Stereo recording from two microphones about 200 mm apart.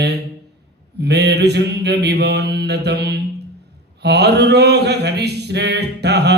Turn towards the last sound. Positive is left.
turn(degrees=-55)  # may be behind; listen again after turning